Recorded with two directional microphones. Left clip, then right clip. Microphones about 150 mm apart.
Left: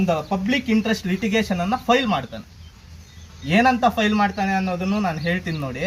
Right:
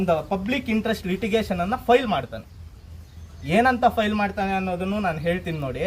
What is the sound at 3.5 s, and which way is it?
Speech, 35° right (ahead or behind).